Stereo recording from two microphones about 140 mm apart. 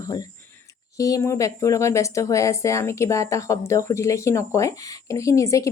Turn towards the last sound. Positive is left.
turn(degrees=20)  # may be behind; listen again after turning